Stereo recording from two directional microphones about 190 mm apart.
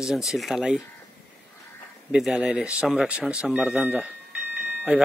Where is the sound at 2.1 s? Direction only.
5° right (ahead or behind).